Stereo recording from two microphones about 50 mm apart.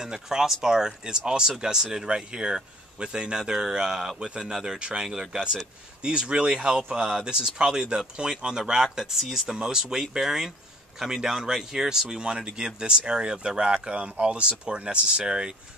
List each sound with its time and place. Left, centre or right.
0.0 s speech: centre
5.0 s speech: centre